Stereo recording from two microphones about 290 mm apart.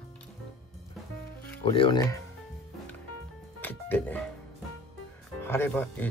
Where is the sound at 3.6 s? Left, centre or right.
Centre.